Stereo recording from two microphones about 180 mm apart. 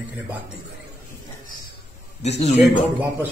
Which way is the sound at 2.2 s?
35° left (ahead or behind).